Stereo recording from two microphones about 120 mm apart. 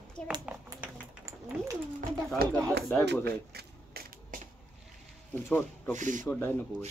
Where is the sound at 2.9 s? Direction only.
15° left (ahead or behind).